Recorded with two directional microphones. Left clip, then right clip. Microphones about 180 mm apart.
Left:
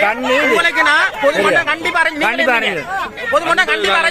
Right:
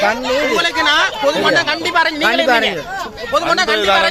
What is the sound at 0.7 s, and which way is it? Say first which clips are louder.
Speech: left 1 dB; 15° right (ahead or behind).